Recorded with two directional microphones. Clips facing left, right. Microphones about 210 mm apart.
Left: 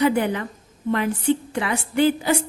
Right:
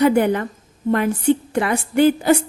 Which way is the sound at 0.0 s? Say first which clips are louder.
Right 5 dB; 50° right (ahead or behind).